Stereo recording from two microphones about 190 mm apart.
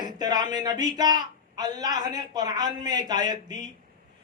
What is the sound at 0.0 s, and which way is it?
Speech, 20° right (ahead or behind).